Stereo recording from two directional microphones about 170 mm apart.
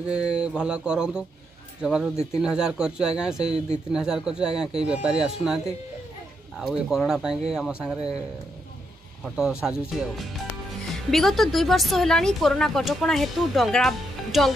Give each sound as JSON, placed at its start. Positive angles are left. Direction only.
{"t": 0.4, "sound": "a woman's voice", "side_deg": -5}
{"t": 3.4, "sound": "speech", "side_deg": -40}
{"t": 3.9, "sound": "a woman's voice", "side_deg": -5}
{"t": 6.6, "sound": "a woman's voice", "side_deg": 0}
{"t": 9.2, "sound": "a woman's voice", "side_deg": -5}